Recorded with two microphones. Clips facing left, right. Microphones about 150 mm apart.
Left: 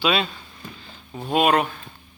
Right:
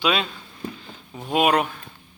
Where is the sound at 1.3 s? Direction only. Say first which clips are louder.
Left 1 dB; 10° right (ahead or behind).